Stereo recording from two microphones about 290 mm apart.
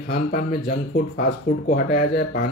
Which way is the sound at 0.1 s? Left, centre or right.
Left.